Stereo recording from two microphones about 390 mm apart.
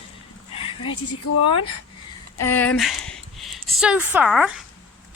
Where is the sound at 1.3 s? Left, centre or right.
Left.